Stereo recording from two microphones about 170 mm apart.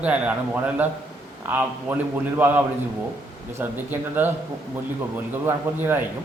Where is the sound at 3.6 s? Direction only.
10° right (ahead or behind).